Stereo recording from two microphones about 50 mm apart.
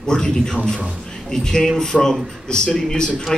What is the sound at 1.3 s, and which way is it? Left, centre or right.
A man's voice, centre.